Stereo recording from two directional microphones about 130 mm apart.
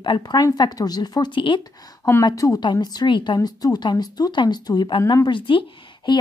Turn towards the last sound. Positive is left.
turn(degrees=40)  # may be behind; listen again after turning